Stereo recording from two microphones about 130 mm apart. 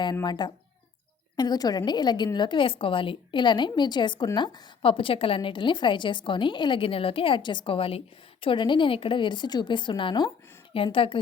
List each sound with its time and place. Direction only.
0.0 s a woman's voice: 35° left (ahead or behind)